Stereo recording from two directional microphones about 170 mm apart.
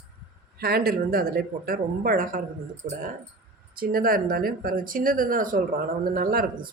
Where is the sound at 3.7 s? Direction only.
60° right (ahead or behind).